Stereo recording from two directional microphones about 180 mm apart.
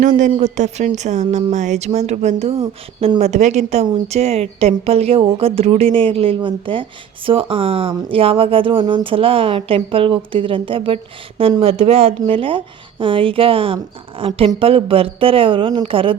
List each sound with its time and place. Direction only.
0.2 s speech: 40° right (ahead or behind)